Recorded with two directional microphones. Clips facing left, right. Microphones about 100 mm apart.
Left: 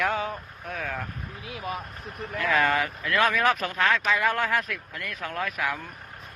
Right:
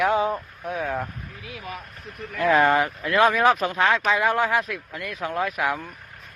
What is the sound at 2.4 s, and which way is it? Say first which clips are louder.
Speech: right 5 dB; 30° right (ahead or behind).